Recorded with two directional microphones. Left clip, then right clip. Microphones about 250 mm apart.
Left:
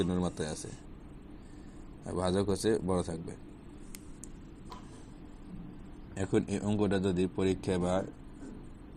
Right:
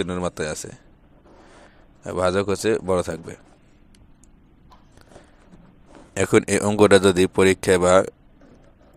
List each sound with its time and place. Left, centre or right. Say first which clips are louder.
0.0 s speech: right 8 dB; right
2.0 s speech: right 11 dB; right
6.1 s speech: right 14 dB; right